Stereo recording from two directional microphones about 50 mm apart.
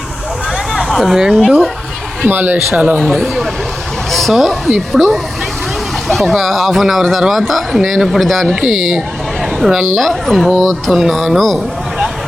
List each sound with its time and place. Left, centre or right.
0.9 s chatter: centre
1.1 s speech: centre
2.2 s a man's voice: right
2.7 s speech: right
3.1 s speech: centre
8.6 s speech: centre
10.1 s speech: centre